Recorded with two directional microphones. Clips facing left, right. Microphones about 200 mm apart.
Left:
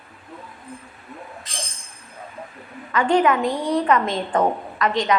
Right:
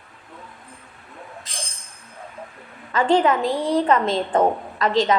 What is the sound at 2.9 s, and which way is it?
A woman's voice, 25° right (ahead or behind).